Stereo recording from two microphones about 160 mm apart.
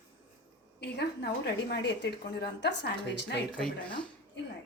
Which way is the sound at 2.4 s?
90° left.